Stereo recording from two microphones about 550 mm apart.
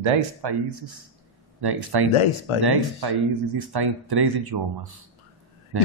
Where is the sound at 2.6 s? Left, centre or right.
Right.